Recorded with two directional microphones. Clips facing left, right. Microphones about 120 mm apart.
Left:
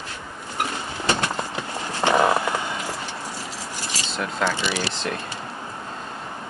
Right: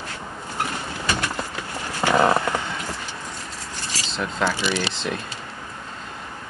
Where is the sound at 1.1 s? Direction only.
25° left (ahead or behind).